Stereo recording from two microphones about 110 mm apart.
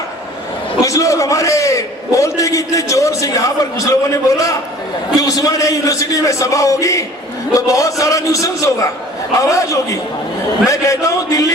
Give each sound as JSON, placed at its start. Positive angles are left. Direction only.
{"t": 0.9, "sound": "a man's voice", "side_deg": 30}